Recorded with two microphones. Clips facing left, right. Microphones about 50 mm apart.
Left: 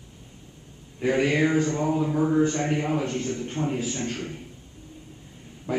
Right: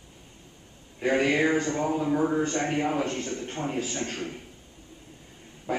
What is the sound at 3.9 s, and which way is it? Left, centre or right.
Speech, right.